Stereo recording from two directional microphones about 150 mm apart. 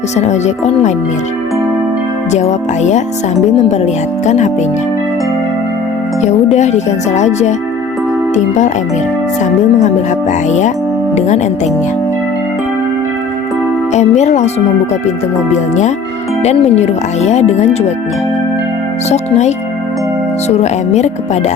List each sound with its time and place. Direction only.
0.2 s speech: 50° left (ahead or behind)
2.3 s speech: 50° left (ahead or behind)
4.3 s speech: 50° left (ahead or behind)
6.2 s speech: 50° left (ahead or behind)
11.1 s speech: 50° left (ahead or behind)
13.9 s speech: 50° left (ahead or behind)
15.5 s speech: 50° left (ahead or behind)
19.0 s speech: 50° left (ahead or behind)